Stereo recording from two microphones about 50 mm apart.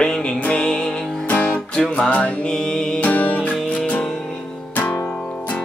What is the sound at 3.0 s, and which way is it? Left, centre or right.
Music, left.